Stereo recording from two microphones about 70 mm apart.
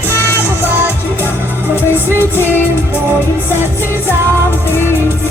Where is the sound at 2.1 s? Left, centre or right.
Left.